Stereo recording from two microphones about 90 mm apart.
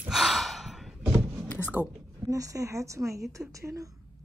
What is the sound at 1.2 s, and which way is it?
Power windows, 20° right (ahead or behind).